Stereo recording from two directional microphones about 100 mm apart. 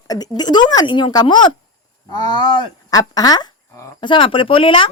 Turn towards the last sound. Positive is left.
turn(degrees=60)  # may be behind; listen again after turning